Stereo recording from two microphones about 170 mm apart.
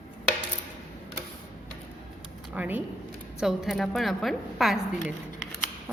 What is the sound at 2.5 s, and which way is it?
A woman's voice, 10° right (ahead or behind).